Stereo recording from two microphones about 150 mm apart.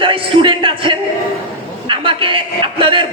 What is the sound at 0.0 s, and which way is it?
A man's voice, 35° right (ahead or behind).